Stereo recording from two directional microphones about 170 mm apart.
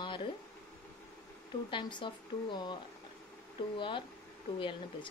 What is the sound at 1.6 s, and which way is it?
Speech, 30° left (ahead or behind).